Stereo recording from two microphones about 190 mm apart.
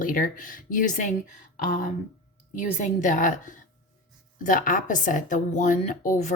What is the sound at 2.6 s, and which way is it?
A woman's voice, 40° left (ahead or behind).